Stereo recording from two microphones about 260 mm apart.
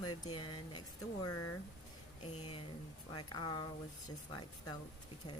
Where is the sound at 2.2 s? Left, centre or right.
Left.